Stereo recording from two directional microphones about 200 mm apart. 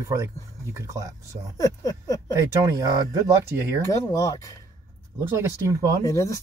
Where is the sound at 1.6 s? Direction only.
20° left (ahead or behind).